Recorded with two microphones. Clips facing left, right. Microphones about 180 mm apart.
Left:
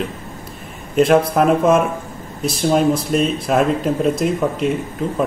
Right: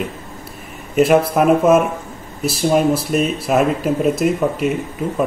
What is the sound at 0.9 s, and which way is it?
Speech, 5° right (ahead or behind).